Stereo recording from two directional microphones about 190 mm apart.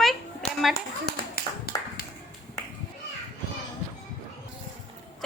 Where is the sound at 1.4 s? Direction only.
55° left (ahead or behind).